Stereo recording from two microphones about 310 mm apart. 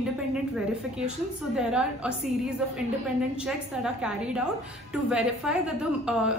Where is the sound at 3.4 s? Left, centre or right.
Centre.